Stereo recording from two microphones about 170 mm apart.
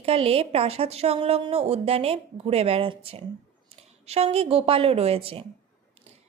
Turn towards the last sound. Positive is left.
turn(degrees=-35)  # may be behind; listen again after turning